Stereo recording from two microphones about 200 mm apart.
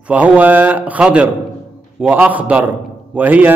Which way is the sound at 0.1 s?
10° right (ahead or behind).